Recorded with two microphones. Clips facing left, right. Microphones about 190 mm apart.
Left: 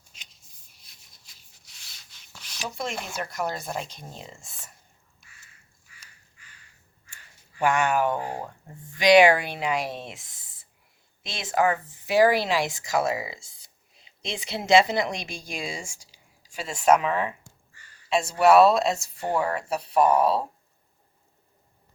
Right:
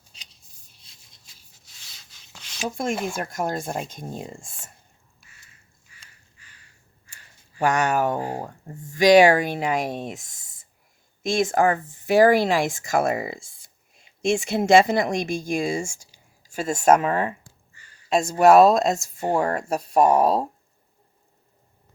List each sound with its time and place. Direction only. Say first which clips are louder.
2.6 s speech: right 7 dB; 50° right (ahead or behind)
7.6 s speech: right 2 dB; 40° right (ahead or behind)